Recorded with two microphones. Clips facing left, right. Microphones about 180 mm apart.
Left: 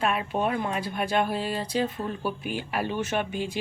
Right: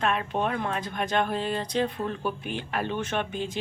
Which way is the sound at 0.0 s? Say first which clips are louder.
Left 1 dB; 10° left (ahead or behind).